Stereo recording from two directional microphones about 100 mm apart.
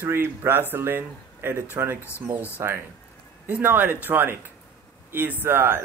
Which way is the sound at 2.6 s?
25° right (ahead or behind).